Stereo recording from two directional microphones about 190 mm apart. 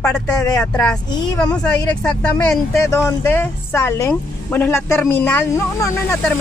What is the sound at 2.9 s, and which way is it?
Speech, 15° left (ahead or behind).